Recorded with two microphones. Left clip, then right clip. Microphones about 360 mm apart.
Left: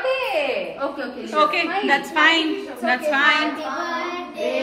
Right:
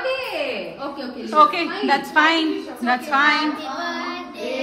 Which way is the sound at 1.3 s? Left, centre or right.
Centre.